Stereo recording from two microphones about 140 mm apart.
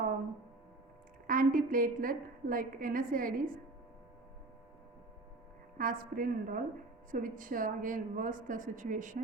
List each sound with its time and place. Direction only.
1.3 s a woman's voice: 80° right
5.7 s a woman's voice: 90° right
7.1 s a woman's voice: 75° right (ahead or behind)